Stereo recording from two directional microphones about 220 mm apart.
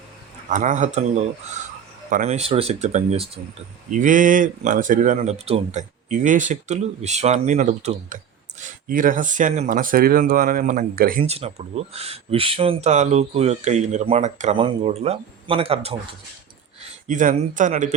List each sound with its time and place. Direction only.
0.4 s speech: 35° right (ahead or behind)
11.2 s speech: 25° right (ahead or behind)
17.1 s speech: 35° right (ahead or behind)